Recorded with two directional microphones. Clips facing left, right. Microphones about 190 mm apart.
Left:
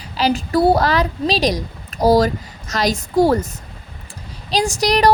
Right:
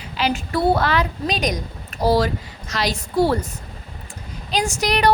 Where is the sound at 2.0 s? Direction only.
40° left (ahead or behind).